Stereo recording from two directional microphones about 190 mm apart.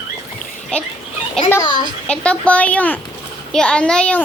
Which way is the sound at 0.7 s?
5° left (ahead or behind).